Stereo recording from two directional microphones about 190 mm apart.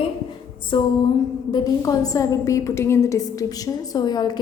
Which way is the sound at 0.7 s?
25° left (ahead or behind).